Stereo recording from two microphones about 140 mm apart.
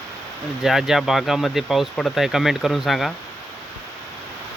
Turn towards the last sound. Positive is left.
turn(degrees=0)  # may be behind; listen again after turning